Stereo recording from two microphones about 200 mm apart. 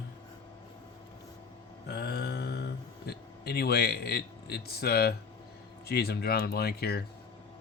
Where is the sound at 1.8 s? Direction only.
55° left (ahead or behind).